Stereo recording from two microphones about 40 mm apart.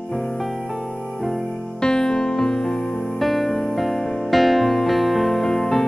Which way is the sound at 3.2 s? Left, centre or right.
Centre.